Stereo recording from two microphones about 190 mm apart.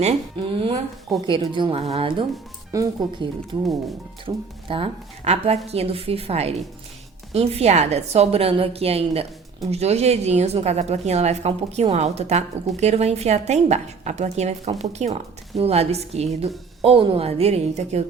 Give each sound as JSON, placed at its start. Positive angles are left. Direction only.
{"t": 0.0, "sound": "a woman's voice", "side_deg": -30}
{"t": 2.7, "sound": "speech", "side_deg": -15}
{"t": 4.7, "sound": "a woman's voice", "side_deg": -30}